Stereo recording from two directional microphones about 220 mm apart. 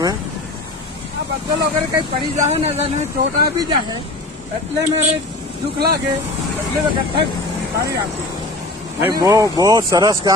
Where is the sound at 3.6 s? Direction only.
20° right (ahead or behind).